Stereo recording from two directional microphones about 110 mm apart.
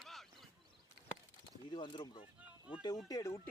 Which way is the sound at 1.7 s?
45° left (ahead or behind).